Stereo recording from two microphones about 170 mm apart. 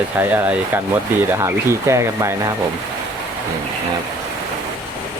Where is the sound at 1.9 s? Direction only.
15° right (ahead or behind).